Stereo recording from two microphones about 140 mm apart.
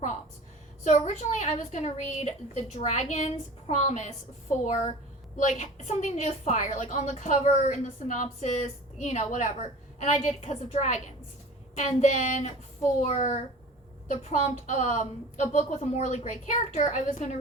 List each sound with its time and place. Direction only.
0.9 s a woman's voice: 55° left (ahead or behind)